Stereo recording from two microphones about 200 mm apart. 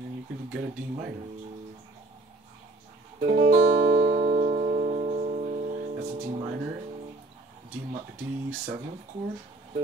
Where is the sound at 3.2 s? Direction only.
45° right (ahead or behind).